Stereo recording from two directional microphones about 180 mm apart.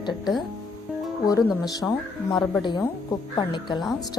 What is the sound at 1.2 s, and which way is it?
Speech, 20° left (ahead or behind).